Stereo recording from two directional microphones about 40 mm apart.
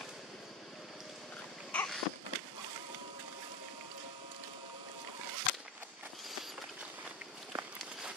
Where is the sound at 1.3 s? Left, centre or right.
Left.